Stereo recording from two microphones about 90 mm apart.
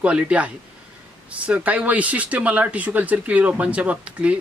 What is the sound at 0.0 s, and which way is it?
Speech, 15° right (ahead or behind).